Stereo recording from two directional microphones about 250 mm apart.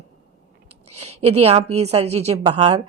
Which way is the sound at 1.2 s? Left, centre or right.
Right.